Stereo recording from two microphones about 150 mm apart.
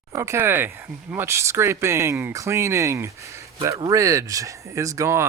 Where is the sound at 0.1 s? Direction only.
20° right (ahead or behind).